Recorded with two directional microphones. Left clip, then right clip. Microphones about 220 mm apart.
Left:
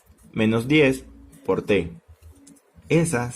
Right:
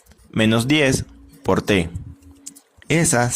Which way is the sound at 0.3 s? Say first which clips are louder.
Right 2 dB; 30° right (ahead or behind).